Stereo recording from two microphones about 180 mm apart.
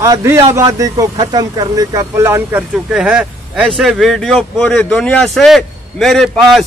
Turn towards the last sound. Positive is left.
turn(degrees=0)  # may be behind; listen again after turning